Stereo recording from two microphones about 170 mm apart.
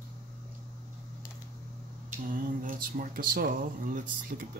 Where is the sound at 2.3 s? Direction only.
55° right (ahead or behind).